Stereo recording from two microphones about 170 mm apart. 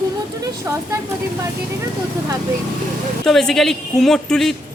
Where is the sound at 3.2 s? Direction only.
5° left (ahead or behind).